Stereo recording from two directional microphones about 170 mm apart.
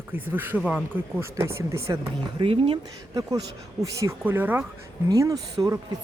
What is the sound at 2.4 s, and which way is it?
Speech, 30° right (ahead or behind).